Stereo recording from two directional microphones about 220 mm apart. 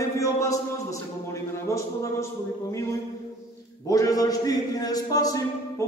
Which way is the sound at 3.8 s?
15° left (ahead or behind).